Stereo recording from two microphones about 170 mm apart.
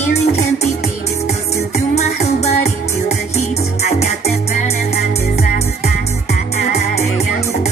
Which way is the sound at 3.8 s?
40° left (ahead or behind).